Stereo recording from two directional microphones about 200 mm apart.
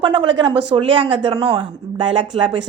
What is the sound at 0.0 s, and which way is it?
Speech, 25° right (ahead or behind).